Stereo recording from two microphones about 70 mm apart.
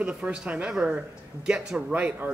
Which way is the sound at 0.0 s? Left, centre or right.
Centre.